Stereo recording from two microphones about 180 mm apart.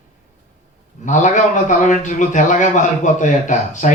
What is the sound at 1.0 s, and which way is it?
A man's voice, 45° left (ahead or behind).